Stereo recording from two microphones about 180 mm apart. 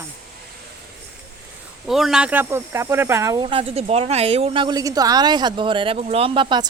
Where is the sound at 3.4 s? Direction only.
30° right (ahead or behind).